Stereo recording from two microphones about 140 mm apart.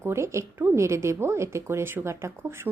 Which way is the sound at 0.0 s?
20° right (ahead or behind).